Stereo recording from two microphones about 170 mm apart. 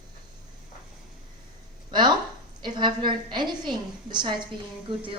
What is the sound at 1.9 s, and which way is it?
A woman's voice, 25° right (ahead or behind).